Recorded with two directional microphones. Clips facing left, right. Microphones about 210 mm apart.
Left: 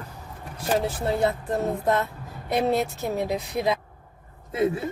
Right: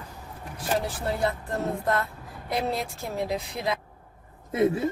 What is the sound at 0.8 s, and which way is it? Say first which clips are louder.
Speech: left 4 dB; 20° left (ahead or behind).